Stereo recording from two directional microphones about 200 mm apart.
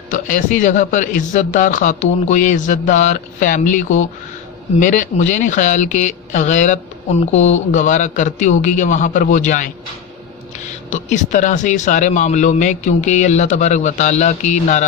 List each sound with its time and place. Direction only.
0.1 s speech: 40° left (ahead or behind)
10.9 s speech: 35° left (ahead or behind)